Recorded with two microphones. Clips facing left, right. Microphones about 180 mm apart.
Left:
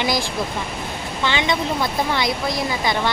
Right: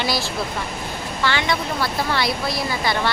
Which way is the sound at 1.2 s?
20° left (ahead or behind).